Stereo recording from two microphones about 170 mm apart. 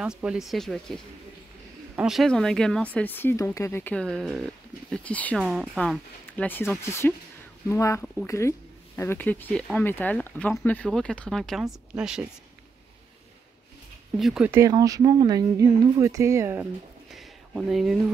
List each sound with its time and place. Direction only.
0.0 s speech: 5° right (ahead or behind)
5.4 s speech: 5° right (ahead or behind)
14.1 s speech: centre (ahead or behind)
14.5 s speech: 20° right (ahead or behind)
17.1 s a sound: centre (ahead or behind)